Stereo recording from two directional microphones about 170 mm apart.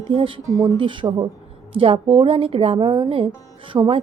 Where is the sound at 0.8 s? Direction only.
30° right (ahead or behind).